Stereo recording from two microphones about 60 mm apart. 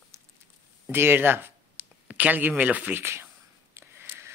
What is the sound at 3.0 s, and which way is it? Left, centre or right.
Speech, right.